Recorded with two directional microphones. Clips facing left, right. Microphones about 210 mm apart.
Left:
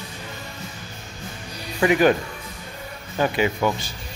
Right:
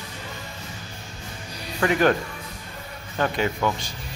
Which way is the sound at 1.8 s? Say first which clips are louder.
Left 3 dB; 10° left (ahead or behind).